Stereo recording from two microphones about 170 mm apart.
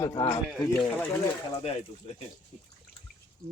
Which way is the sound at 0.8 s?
10° left (ahead or behind).